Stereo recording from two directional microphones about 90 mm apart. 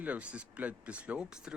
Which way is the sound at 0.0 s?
15° right (ahead or behind).